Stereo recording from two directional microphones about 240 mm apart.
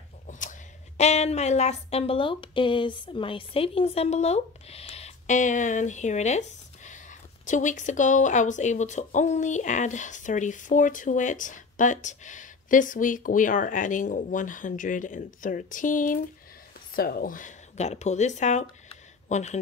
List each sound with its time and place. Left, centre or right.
0.3 s speech: left